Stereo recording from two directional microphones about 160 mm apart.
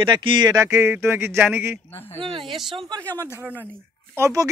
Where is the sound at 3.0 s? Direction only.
10° left (ahead or behind).